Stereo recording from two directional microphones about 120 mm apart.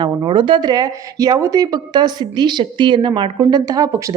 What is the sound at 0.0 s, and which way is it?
Speech, 40° right (ahead or behind).